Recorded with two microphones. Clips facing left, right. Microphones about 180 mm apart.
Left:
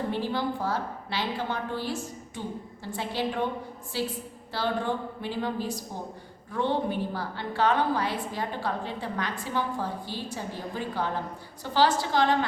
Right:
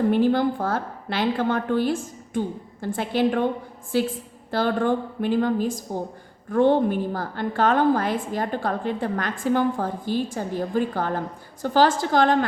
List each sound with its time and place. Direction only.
0.1 s a woman's voice: 55° right (ahead or behind)